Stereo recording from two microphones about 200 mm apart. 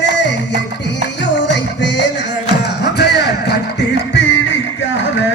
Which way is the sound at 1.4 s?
65° left (ahead or behind).